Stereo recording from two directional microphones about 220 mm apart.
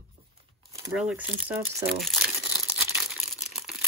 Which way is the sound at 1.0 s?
5° right (ahead or behind).